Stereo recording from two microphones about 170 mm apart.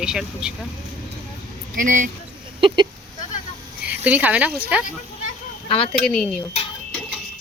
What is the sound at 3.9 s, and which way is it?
Speech, 10° right (ahead or behind).